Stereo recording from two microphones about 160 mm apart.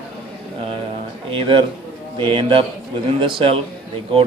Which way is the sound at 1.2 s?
30° right (ahead or behind).